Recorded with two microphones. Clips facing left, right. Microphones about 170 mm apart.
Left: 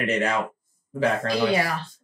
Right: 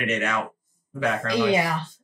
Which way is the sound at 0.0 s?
35° left (ahead or behind).